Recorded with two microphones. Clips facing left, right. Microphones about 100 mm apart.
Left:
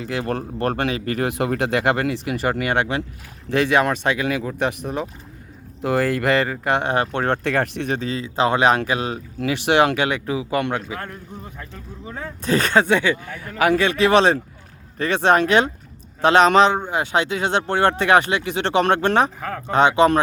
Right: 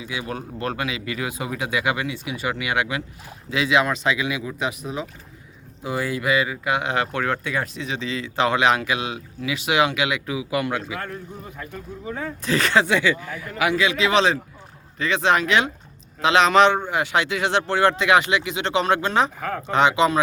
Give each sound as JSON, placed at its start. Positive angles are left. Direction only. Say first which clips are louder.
{"t": 0.0, "sound": "speech", "louder": "left 6 dB", "side_deg": 60}
{"t": 2.1, "sound": "speech", "louder": "left 6 dB", "side_deg": 70}
{"t": 2.5, "sound": "speech", "louder": "left 3 dB", "side_deg": 45}
{"t": 3.5, "sound": "speech", "louder": "left 3 dB", "side_deg": 55}
{"t": 6.9, "sound": "speech", "louder": "left 3 dB", "side_deg": 35}
{"t": 7.4, "sound": "speech", "louder": "left 6 dB", "side_deg": 70}